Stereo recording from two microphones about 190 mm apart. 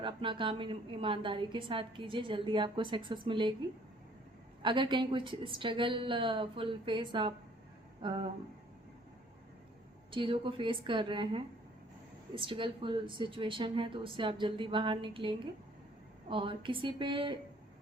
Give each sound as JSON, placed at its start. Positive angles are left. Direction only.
{"t": 0.0, "sound": "a woman's voice", "side_deg": -25}
{"t": 4.6, "sound": "a woman's voice", "side_deg": -25}
{"t": 10.1, "sound": "a woman's voice", "side_deg": -25}